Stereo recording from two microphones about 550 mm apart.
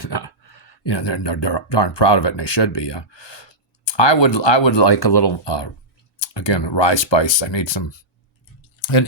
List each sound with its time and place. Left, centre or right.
0.0 s speech: left